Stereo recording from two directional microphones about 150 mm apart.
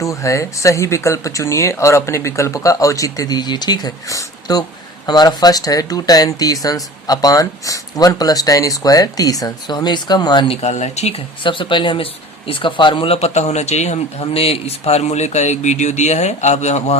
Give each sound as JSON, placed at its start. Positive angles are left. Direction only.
{"t": 0.0, "sound": "speech", "side_deg": 20}
{"t": 10.6, "sound": "speech", "side_deg": 45}